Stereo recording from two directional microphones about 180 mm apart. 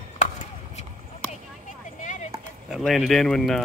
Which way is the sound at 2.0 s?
45° left (ahead or behind).